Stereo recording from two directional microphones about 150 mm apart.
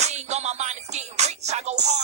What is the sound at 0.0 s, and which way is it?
Music, 50° right (ahead or behind).